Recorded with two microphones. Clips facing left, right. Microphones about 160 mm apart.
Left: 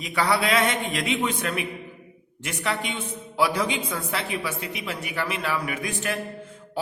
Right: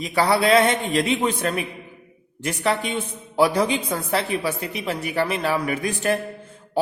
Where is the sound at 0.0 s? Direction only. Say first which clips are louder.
Right 4 dB; 35° right (ahead or behind).